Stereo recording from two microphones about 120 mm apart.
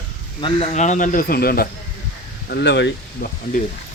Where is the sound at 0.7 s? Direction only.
85° left.